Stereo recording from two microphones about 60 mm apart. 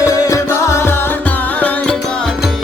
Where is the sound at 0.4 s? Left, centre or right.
Left.